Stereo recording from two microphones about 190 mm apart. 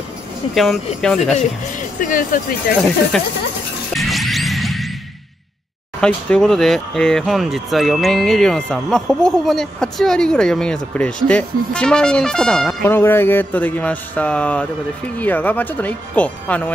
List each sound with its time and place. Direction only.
0.6 s speech: centre (ahead or behind)
2.0 s speech: 45° left (ahead or behind)
3.1 s speech: 5° left (ahead or behind)
3.9 s music: centre (ahead or behind)
5.9 s speech: 5° left (ahead or behind)